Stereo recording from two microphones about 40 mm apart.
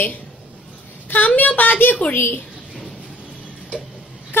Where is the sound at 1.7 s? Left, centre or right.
Left.